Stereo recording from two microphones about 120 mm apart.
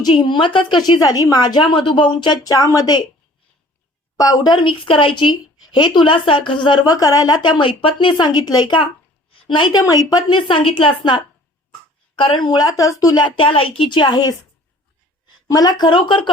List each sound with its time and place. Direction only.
0.0 s speech: 40° left (ahead or behind)
4.2 s speech: 35° left (ahead or behind)
15.4 s speech: 30° left (ahead or behind)